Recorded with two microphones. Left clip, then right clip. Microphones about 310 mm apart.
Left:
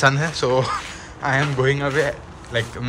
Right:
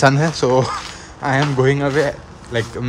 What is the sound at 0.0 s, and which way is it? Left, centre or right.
Speech, centre.